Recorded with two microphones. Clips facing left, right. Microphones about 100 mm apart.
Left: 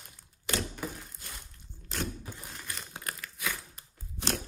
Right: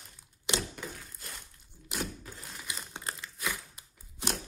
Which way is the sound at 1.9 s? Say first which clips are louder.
Left 1 dB; 5° right (ahead or behind).